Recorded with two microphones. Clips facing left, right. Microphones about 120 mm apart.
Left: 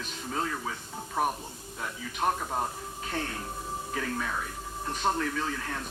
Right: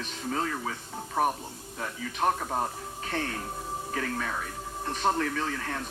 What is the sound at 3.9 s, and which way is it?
Speech, 50° right (ahead or behind).